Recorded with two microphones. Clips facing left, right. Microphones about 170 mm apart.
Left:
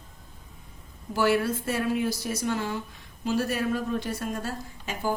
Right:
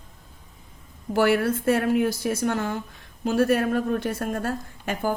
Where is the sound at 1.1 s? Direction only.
60° right (ahead or behind).